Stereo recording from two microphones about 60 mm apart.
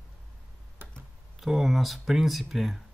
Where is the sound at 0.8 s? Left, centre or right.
Right.